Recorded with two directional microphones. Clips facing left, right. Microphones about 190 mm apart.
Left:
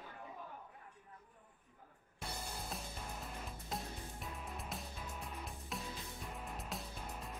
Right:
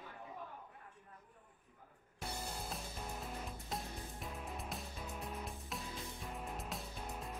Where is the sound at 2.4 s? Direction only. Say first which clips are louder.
Right 1 dB; centre (ahead or behind).